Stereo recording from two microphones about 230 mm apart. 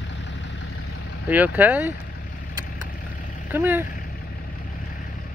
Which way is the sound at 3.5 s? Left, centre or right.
Centre.